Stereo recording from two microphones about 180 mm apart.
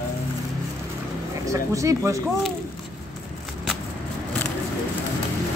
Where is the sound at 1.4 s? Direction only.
15° right (ahead or behind).